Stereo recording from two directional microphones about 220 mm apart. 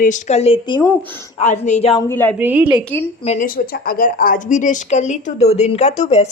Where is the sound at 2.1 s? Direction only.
10° left (ahead or behind).